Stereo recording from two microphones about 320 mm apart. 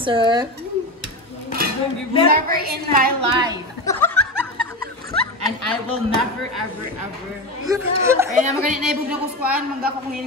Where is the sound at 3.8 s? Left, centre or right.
Centre.